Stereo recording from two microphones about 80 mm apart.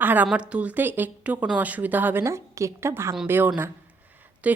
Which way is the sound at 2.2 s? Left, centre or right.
Right.